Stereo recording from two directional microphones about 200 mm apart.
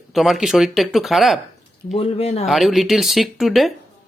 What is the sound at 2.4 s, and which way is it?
Speech, centre (ahead or behind).